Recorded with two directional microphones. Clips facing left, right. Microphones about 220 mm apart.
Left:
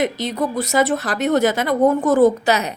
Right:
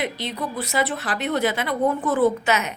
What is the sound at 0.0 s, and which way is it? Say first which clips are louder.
Speech: left 7 dB; 45° left (ahead or behind).